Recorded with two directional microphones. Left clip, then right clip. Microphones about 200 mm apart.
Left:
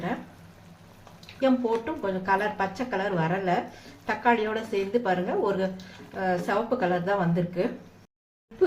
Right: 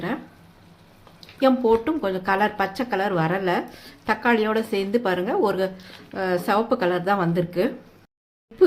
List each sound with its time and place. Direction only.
1.4 s speech: 50° right (ahead or behind)